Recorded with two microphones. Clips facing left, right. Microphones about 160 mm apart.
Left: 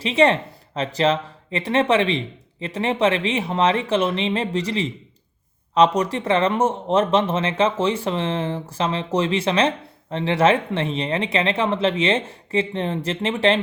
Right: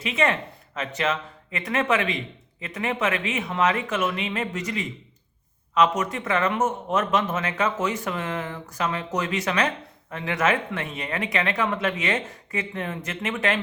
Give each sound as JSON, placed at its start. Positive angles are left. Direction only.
{"t": 0.0, "sound": "speech", "side_deg": 30}